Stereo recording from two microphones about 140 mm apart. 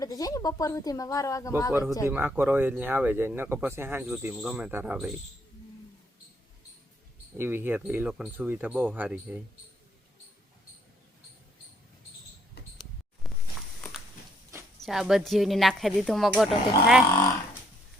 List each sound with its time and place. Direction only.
0.0 s speech: 25° left (ahead or behind)
2.0 s speech: 15° right (ahead or behind)
7.3 s speech: 15° right (ahead or behind)
13.2 s a sound: centre (ahead or behind)
14.8 s speech: centre (ahead or behind)